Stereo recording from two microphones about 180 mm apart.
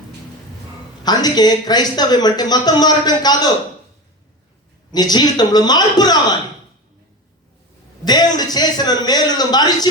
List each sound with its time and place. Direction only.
1.0 s speech: 20° left (ahead or behind)
4.9 s speech: 20° left (ahead or behind)
8.0 s speech: 20° left (ahead or behind)